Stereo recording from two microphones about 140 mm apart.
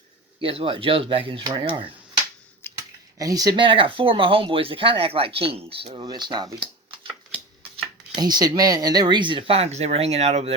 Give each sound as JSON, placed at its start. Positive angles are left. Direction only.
{"t": 0.3, "sound": "speech", "side_deg": -40}
{"t": 2.7, "sound": "speech", "side_deg": -25}
{"t": 6.1, "sound": "speech", "side_deg": -30}
{"t": 8.1, "sound": "speech", "side_deg": -30}